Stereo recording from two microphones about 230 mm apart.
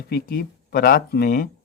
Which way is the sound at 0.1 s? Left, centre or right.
Left.